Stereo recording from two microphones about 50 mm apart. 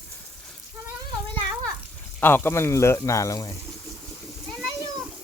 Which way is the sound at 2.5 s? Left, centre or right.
Left.